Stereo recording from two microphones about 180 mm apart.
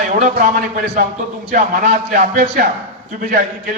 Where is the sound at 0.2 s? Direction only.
50° right (ahead or behind).